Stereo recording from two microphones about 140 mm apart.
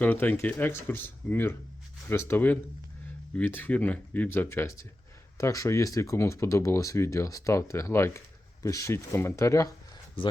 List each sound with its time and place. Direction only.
0.0 s speech: 10° left (ahead or behind)